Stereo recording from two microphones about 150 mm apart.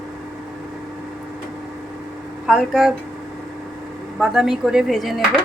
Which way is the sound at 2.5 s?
Centre (ahead or behind).